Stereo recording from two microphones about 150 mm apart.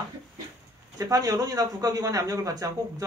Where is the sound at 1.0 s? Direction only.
25° right (ahead or behind).